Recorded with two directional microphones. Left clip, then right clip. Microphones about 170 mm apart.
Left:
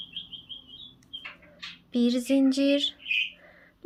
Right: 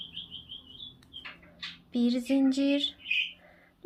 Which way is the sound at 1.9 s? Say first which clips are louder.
Left 3 dB; 25° left (ahead or behind).